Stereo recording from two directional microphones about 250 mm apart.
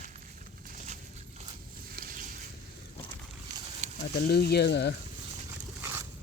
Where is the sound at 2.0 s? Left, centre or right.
Right.